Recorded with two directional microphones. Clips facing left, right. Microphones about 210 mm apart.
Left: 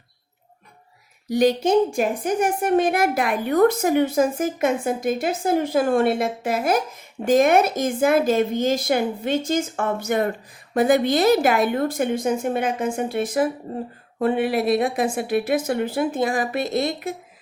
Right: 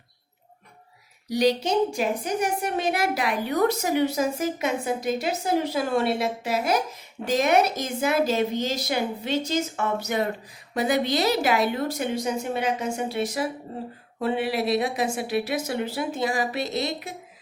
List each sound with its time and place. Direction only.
1.3 s a woman's voice: 50° left (ahead or behind)